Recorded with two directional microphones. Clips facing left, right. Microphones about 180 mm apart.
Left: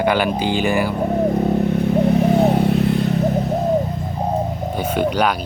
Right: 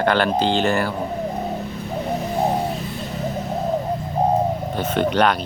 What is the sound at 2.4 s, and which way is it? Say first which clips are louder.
Vehicle: left 6 dB; 65° left (ahead or behind).